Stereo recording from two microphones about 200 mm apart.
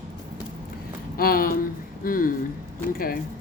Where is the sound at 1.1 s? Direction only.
50° left (ahead or behind).